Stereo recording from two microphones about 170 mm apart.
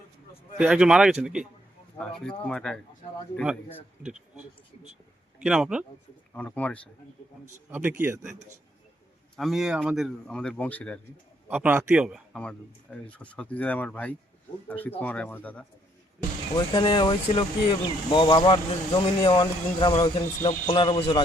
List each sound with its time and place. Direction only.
0.6 s speech: 5° right (ahead or behind)
4.1 s speech: 45° right (ahead or behind)
5.4 s speech: 5° right (ahead or behind)
6.3 s speech: 10° left (ahead or behind)
7.7 s speech: 10° right (ahead or behind)
9.3 s speech: centre (ahead or behind)
11.4 s speech: 10° right (ahead or behind); by 15.6 s 10° left (ahead or behind)
16.6 s speech: 30° left (ahead or behind)